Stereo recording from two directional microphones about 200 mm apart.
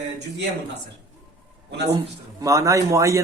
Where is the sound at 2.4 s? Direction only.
15° right (ahead or behind).